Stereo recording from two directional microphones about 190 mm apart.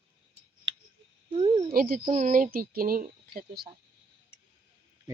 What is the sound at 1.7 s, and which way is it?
Speech, 50° right (ahead or behind).